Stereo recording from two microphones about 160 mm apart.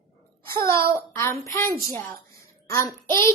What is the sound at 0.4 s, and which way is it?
Speech, 70° right (ahead or behind).